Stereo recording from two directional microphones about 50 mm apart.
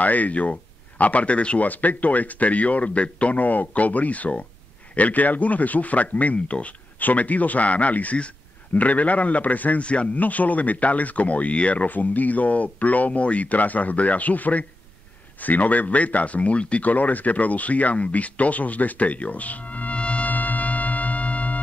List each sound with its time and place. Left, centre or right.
0.0 s a man's voice: left